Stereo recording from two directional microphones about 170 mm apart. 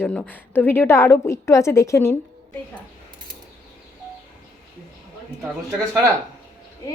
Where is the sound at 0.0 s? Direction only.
5° left (ahead or behind).